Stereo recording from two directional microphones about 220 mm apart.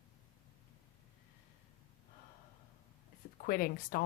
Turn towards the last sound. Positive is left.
turn(degrees=40)  # may be behind; listen again after turning